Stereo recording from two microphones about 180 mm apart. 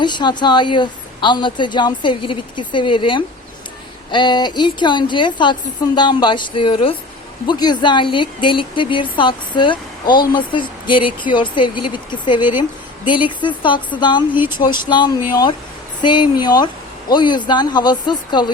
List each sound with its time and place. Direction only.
0.0 s a woman's voice: 25° left (ahead or behind)